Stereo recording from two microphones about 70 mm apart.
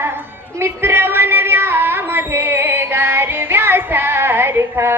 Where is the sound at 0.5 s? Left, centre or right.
Right.